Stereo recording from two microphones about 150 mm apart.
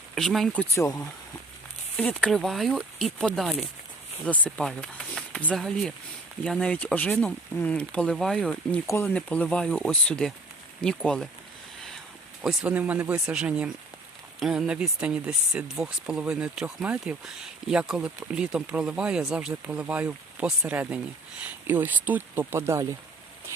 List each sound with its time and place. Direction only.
0.1 s speech: centre (ahead or behind)
0.8 s speech: 20° left (ahead or behind)
2.0 s speech: 10° left (ahead or behind)
12.4 s speech: 5° right (ahead or behind)